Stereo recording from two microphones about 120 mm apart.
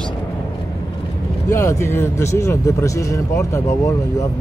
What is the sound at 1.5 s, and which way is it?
Speech, 25° left (ahead or behind).